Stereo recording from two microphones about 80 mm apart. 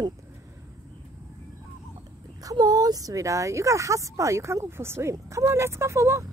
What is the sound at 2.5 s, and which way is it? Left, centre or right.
Speech, right.